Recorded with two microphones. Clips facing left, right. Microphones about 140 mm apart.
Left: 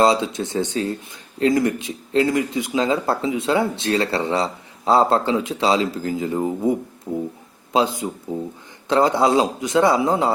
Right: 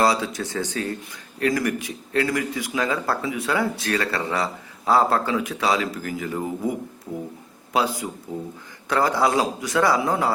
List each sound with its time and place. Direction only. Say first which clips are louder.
0.0 s speech: left 4 dB; 20° left (ahead or behind)